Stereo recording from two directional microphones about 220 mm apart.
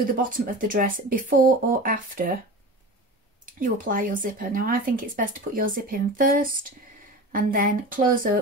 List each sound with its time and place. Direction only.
0.2 s speech: 40° right (ahead or behind)
3.4 s speech: 40° right (ahead or behind)